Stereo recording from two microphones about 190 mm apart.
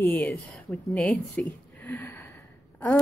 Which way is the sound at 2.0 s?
15° left (ahead or behind).